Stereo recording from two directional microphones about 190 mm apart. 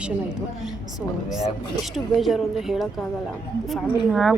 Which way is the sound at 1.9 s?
Centre (ahead or behind).